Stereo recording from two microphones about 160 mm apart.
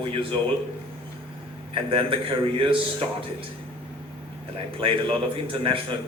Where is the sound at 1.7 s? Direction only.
35° right (ahead or behind).